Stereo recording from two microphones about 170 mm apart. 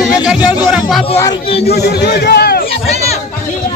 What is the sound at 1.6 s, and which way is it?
A man's voice, 70° left (ahead or behind).